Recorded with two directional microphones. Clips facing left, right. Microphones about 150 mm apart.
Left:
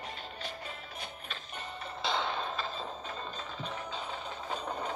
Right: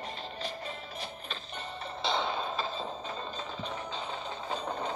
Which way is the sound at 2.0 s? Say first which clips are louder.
Right 2 dB; centre (ahead or behind).